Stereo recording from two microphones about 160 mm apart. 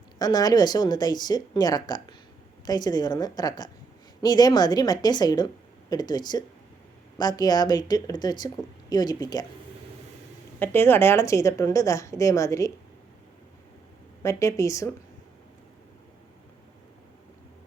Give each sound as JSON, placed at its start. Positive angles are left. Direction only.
{"t": 0.2, "sound": "a woman's voice", "side_deg": 25}
{"t": 10.6, "sound": "a woman's voice", "side_deg": 15}
{"t": 14.2, "sound": "a woman's voice", "side_deg": 20}